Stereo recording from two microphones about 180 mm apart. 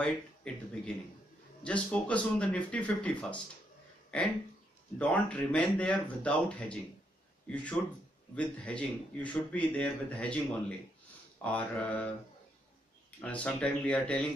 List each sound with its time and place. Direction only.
0.0 s speech: 5° left (ahead or behind)
4.9 s a man's voice: 5° left (ahead or behind)
11.4 s speech: 10° left (ahead or behind)
13.2 s speech: 5° left (ahead or behind)